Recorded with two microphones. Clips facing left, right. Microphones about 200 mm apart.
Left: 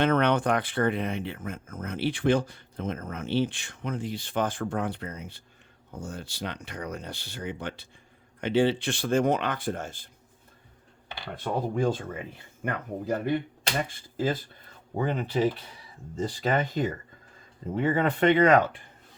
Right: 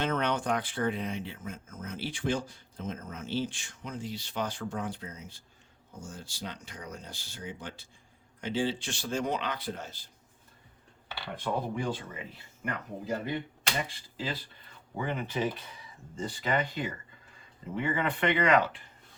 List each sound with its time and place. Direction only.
0.0 s speech: 60° left (ahead or behind)
11.4 s speech: 45° left (ahead or behind)
16.4 s speech: 45° left (ahead or behind)